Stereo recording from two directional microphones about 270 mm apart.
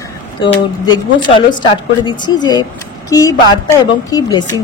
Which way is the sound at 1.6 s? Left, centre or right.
Centre.